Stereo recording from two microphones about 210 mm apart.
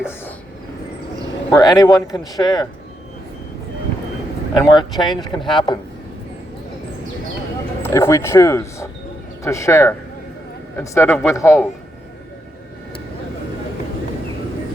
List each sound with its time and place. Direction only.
1.5 s speech: 20° left (ahead or behind)
4.5 s speech: 20° left (ahead or behind)
7.8 s speech: 10° left (ahead or behind)